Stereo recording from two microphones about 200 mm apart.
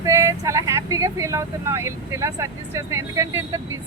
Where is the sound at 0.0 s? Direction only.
15° right (ahead or behind).